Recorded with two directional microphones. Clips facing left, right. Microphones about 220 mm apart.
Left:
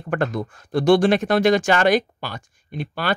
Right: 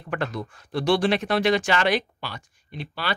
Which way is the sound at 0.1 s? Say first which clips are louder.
Left 6 dB; 45° left (ahead or behind).